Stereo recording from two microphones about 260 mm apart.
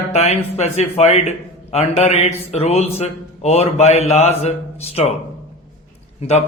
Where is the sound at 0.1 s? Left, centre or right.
Left.